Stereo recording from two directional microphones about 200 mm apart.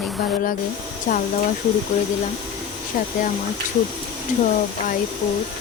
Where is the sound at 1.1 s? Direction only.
40° left (ahead or behind).